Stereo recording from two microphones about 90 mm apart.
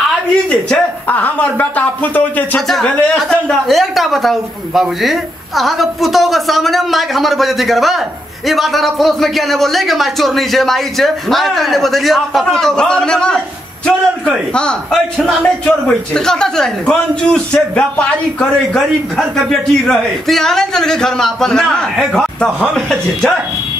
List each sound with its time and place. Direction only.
0.5 s a man's voice: 15° left (ahead or behind)